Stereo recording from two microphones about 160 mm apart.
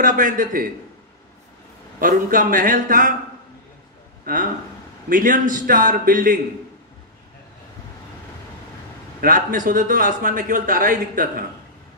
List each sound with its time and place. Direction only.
0.0 s a man's voice: 55° right (ahead or behind)
2.0 s a man's voice: 60° right (ahead or behind)
5.1 s a man's voice: 55° right (ahead or behind)
9.2 s a man's voice: 60° right (ahead or behind)